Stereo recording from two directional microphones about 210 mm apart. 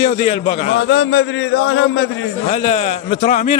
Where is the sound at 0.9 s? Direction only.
65° left (ahead or behind).